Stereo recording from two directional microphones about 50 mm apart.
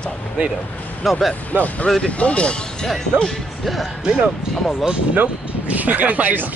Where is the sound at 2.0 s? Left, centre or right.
Left.